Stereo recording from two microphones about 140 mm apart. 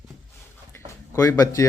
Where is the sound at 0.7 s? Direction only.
20° left (ahead or behind).